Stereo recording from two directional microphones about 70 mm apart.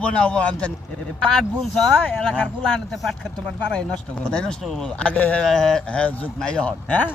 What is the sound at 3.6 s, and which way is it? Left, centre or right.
A man's voice, centre.